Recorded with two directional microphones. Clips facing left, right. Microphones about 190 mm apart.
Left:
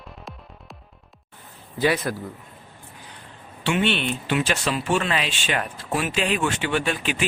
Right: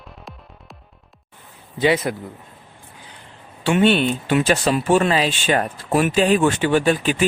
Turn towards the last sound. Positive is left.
turn(degrees=-40)  # may be behind; listen again after turning